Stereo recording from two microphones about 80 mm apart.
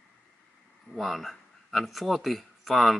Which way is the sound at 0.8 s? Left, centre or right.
Centre.